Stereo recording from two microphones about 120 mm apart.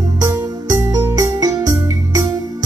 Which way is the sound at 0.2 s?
30° right (ahead or behind).